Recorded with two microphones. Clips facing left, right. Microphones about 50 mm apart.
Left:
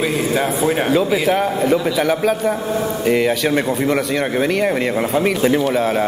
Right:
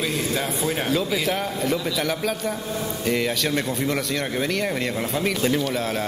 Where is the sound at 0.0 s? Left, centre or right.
Centre.